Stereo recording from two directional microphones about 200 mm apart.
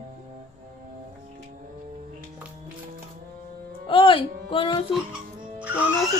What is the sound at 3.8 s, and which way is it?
Speech, 25° left (ahead or behind).